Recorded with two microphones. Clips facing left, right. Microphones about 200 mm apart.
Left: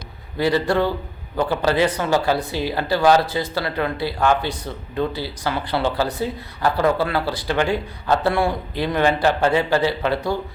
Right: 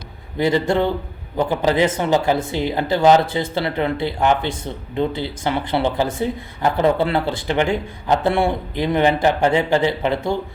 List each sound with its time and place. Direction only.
0.3 s a man's voice: 20° right (ahead or behind)